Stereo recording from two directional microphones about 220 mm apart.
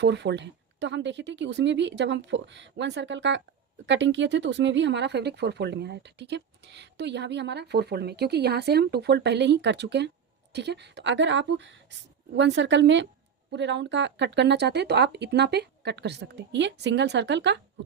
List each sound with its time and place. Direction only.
0.0 s speech: 50° right (ahead or behind)